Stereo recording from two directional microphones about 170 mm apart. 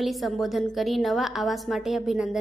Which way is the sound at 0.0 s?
Centre (ahead or behind).